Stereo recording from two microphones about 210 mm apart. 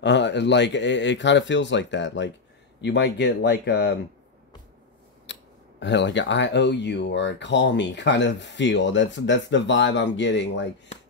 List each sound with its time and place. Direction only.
0.0 s speech: 55° left (ahead or behind)
5.2 s speech: 60° left (ahead or behind)